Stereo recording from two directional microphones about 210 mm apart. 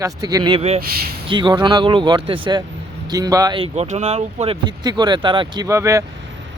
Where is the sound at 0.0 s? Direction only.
15° right (ahead or behind).